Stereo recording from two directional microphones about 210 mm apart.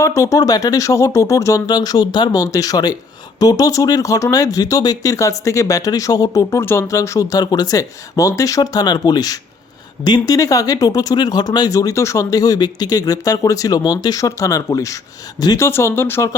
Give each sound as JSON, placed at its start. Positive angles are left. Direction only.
{"t": 0.0, "sound": "speech", "side_deg": 15}